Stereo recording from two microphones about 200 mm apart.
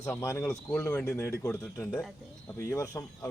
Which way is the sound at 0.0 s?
15° left (ahead or behind).